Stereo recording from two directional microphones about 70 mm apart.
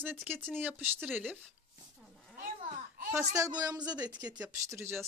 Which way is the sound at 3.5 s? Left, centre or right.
Right.